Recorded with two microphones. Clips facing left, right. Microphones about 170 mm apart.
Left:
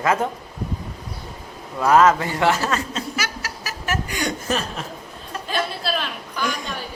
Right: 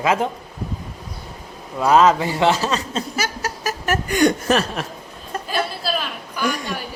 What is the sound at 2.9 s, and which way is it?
Chuckle, 40° right (ahead or behind).